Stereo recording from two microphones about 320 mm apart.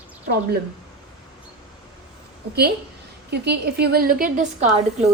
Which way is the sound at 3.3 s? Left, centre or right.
Right.